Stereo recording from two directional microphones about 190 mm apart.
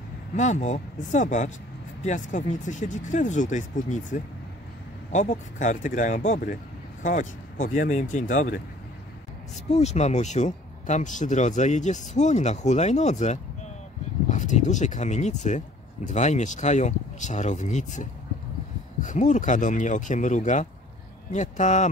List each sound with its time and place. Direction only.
0.4 s speech: 40° left (ahead or behind)
9.7 s speech: 35° left (ahead or behind)